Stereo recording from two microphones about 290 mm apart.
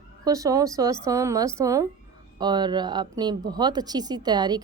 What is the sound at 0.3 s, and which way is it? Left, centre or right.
Speech, centre.